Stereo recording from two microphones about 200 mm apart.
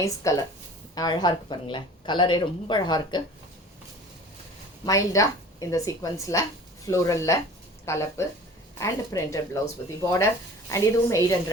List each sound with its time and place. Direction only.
0.0 s a woman's voice: 15° left (ahead or behind)
4.9 s a woman's voice: 15° left (ahead or behind)